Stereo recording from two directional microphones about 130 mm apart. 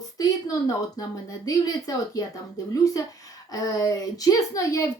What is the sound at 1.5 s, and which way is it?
Speech, 25° left (ahead or behind).